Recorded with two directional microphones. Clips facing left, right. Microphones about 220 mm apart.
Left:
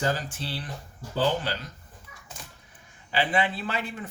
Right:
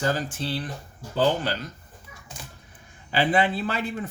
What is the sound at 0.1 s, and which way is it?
Speech, 45° right (ahead or behind).